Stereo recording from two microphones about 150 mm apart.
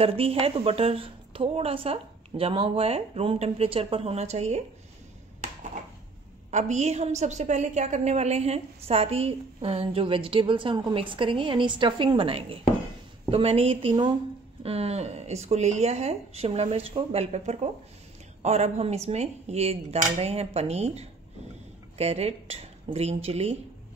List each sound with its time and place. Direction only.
0.0 s a woman's voice: 40° right (ahead or behind)
6.5 s a woman's voice: 50° right (ahead or behind)